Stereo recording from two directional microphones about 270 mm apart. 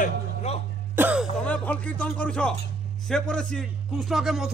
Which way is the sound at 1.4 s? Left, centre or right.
Centre.